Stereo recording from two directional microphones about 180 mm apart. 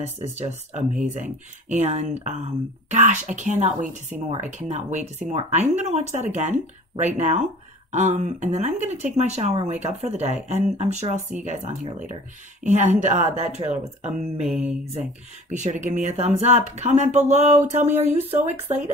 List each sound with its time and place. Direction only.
0.0 s speech: 40° right (ahead or behind)
14.5 s mantra: 5° right (ahead or behind)
15.5 s speech: 40° right (ahead or behind)
17.8 s speech: 10° right (ahead or behind)